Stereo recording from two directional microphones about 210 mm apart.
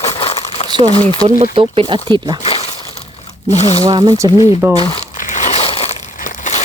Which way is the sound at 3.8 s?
20° right (ahead or behind).